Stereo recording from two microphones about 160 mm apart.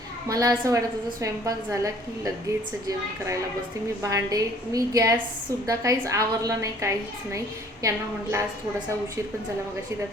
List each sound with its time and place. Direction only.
0.3 s a woman's voice: 20° right (ahead or behind)
4.0 s a woman's voice: 20° right (ahead or behind)